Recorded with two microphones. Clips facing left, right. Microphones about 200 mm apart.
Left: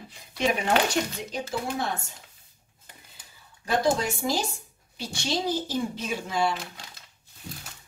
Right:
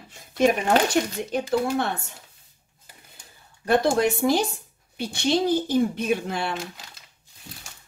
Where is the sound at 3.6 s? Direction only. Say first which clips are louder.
Right 5 dB; 60° right (ahead or behind).